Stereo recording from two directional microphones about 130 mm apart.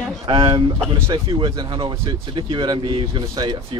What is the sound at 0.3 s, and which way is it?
Speech, 40° right (ahead or behind).